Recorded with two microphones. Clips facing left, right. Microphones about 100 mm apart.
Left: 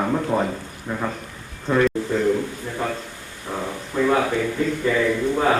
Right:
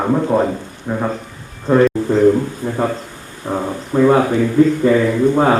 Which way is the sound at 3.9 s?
40° right (ahead or behind).